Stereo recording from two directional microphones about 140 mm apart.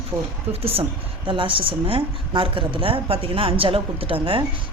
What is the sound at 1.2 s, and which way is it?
A woman's voice, 35° right (ahead or behind).